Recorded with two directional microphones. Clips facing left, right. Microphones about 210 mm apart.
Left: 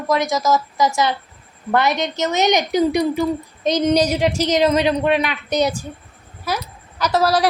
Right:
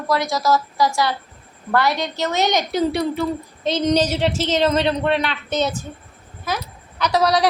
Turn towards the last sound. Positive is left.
turn(degrees=0)  # may be behind; listen again after turning